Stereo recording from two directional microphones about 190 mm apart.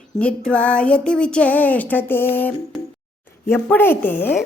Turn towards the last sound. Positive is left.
turn(degrees=10)  # may be behind; listen again after turning